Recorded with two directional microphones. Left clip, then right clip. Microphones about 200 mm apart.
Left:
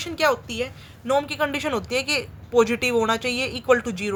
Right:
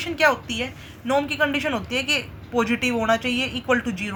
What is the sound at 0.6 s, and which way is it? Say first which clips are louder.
A woman's voice: even; 45° left (ahead or behind).